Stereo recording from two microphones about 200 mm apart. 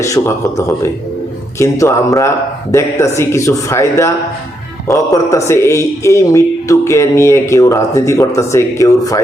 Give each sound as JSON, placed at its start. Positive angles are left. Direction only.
{"t": 0.0, "sound": "speech", "side_deg": 15}